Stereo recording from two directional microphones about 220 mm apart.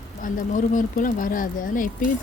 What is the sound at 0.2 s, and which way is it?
Speech, 35° left (ahead or behind).